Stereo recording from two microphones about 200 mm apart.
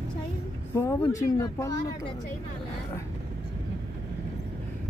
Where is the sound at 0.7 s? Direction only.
15° left (ahead or behind).